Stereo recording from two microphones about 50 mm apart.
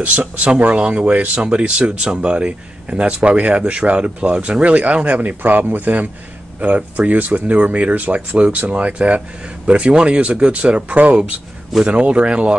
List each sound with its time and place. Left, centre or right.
0.0 s speech: right
5.4 s speech: right